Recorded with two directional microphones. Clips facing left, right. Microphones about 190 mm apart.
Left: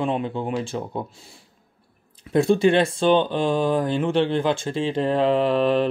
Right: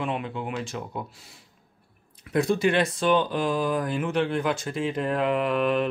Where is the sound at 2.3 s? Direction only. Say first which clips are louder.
Left 5 dB; 30° left (ahead or behind).